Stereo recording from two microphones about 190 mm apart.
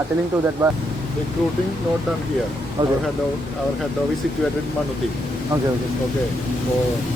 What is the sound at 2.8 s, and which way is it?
Speech, 25° right (ahead or behind).